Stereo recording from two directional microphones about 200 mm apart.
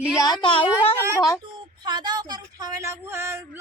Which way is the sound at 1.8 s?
20° right (ahead or behind).